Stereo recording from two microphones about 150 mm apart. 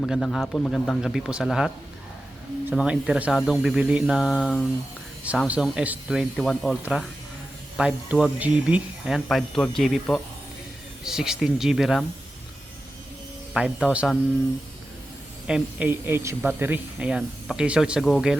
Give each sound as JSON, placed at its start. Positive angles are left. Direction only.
{"t": 0.0, "sound": "speech", "side_deg": 5}
{"t": 13.5, "sound": "speech", "side_deg": -5}
{"t": 15.4, "sound": "speech", "side_deg": -5}